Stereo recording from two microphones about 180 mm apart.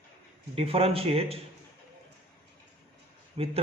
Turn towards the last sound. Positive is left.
turn(degrees=-35)  # may be behind; listen again after turning